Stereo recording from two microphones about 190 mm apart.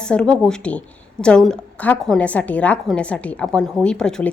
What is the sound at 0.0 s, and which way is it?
A woman's voice, 5° left (ahead or behind).